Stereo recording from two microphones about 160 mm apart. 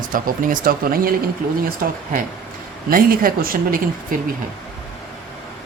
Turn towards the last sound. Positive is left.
turn(degrees=-60)  # may be behind; listen again after turning